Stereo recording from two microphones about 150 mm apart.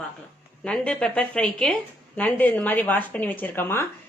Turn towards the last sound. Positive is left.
turn(degrees=15)  # may be behind; listen again after turning